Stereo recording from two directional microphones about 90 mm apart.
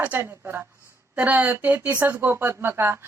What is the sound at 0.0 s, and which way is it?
Speech, 20° right (ahead or behind).